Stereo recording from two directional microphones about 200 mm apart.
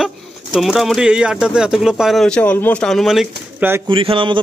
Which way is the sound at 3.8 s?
25° right (ahead or behind).